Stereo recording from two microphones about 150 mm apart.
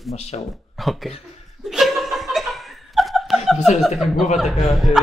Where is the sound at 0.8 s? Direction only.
Centre (ahead or behind).